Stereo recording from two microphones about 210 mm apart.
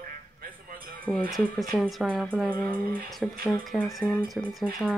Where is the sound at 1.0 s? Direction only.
5° left (ahead or behind).